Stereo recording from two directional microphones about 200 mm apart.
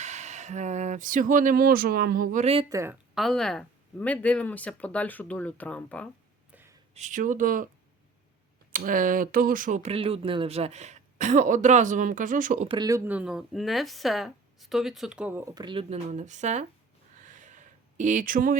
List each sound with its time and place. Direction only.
0.0 s speech: 35° right (ahead or behind)
2.6 s a woman's voice: 15° right (ahead or behind)
3.2 s speech: centre (ahead or behind)
6.5 s a sound: 10° right (ahead or behind)
6.9 s speech: 40° right (ahead or behind)
8.7 s speech: 45° right (ahead or behind)
12.6 s speech: 20° right (ahead or behind)
13.1 s speech: 5° right (ahead or behind); by 16.6 s 35° right (ahead or behind)
17.2 s a sound: 40° right (ahead or behind)